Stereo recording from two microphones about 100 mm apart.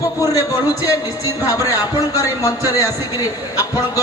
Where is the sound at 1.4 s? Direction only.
35° left (ahead or behind).